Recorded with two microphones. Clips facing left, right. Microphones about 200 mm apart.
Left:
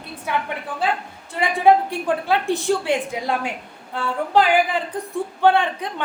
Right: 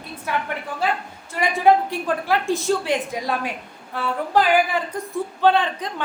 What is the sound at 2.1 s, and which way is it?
A woman's voice, 15° left (ahead or behind).